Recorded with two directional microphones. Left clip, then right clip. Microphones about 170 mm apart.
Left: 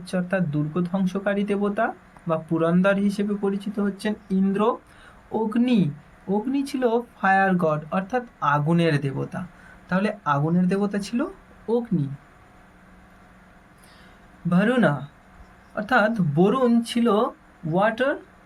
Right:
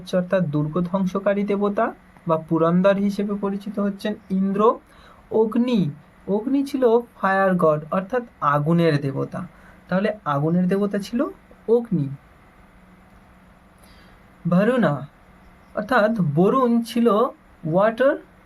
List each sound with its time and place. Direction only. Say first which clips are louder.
0.0 s speech: right 5 dB; 50° right (ahead or behind)
9.9 s speech: right 1 dB; 20° right (ahead or behind)
14.5 s speech: right 2 dB; 45° right (ahead or behind)